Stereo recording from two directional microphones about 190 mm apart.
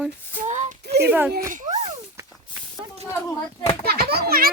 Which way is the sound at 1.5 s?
40° right (ahead or behind).